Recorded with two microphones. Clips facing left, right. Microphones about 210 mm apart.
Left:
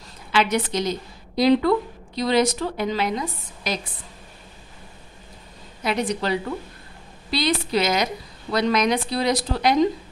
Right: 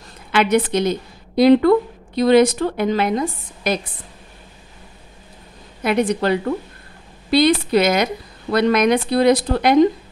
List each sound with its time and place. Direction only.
0.3 s a woman's voice: 55° right (ahead or behind)
5.9 s a woman's voice: 55° right (ahead or behind)